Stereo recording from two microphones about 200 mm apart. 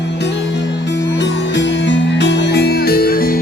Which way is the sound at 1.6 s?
65° left (ahead or behind).